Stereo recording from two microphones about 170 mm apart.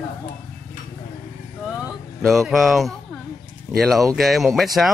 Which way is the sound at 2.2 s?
Centre (ahead or behind).